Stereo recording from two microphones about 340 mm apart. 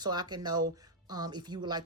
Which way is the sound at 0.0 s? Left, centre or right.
Centre.